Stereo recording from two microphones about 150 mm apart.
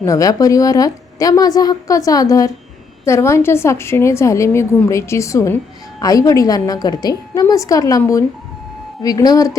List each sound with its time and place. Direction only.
0.0 s a woman's voice: 20° left (ahead or behind)